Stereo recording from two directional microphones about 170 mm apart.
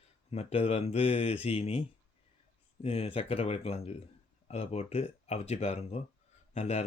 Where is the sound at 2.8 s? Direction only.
35° left (ahead or behind).